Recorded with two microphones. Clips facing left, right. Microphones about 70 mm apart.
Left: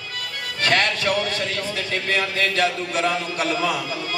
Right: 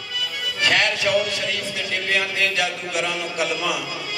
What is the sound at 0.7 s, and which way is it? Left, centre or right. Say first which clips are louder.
Music: even; left.